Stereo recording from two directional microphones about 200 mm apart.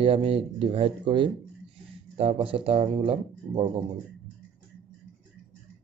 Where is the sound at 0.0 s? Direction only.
30° right (ahead or behind).